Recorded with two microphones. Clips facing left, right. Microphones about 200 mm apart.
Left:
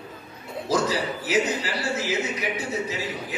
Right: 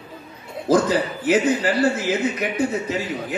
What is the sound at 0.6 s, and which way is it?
A man's voice, 55° right (ahead or behind).